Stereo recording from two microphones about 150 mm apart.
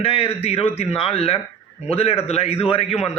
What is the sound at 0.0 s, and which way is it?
A man's voice, 40° left (ahead or behind).